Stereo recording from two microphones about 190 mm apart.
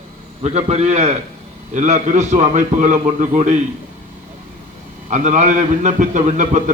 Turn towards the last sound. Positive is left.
turn(degrees=-40)  # may be behind; listen again after turning